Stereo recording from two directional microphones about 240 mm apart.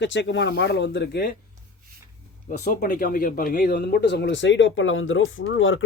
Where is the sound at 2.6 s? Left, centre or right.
Left.